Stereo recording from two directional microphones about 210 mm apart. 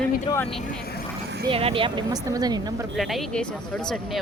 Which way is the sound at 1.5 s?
25° right (ahead or behind).